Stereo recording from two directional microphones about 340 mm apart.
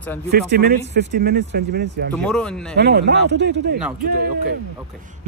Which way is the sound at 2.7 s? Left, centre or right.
Right.